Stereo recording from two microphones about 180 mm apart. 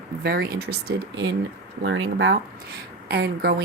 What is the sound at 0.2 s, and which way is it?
Speech, 60° right (ahead or behind).